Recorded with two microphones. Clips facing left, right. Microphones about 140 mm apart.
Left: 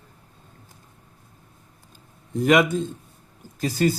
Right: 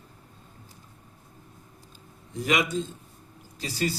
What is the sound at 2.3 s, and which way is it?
A man's voice, 55° left (ahead or behind).